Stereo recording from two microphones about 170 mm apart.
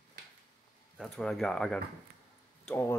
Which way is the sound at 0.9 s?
5° left (ahead or behind).